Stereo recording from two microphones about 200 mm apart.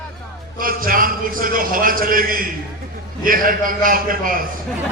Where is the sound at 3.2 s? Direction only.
45° right (ahead or behind).